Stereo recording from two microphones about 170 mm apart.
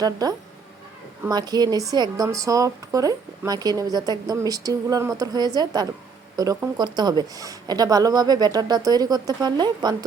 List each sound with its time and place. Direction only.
0.0 s a woman's voice: 20° right (ahead or behind)